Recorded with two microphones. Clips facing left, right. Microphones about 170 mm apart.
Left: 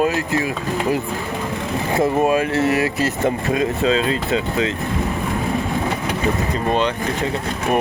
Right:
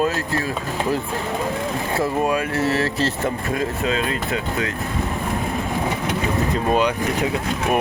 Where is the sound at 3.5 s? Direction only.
25° left (ahead or behind).